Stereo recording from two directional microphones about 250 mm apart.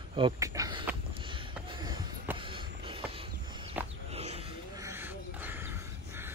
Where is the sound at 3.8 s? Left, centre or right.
Centre.